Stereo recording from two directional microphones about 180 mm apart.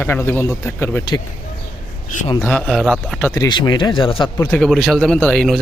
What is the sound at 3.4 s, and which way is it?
Speech, 25° left (ahead or behind).